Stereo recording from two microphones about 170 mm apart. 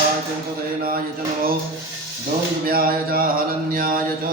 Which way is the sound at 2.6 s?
60° right (ahead or behind).